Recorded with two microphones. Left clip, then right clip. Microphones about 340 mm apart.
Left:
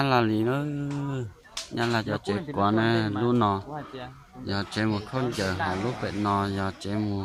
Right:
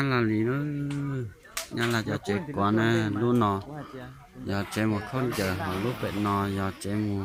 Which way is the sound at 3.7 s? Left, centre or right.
Left.